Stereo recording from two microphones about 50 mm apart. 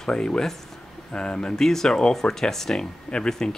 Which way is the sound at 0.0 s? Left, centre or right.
Centre.